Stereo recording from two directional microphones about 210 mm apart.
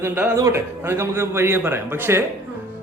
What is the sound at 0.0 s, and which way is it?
Speech, 10° right (ahead or behind).